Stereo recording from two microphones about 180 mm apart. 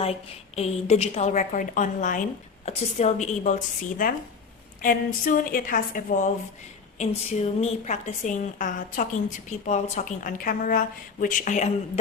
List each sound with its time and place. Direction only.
0.0 s a woman's voice: 35° left (ahead or behind); by 6.3 s 50° left (ahead or behind)
7.0 s a woman's voice: 35° left (ahead or behind)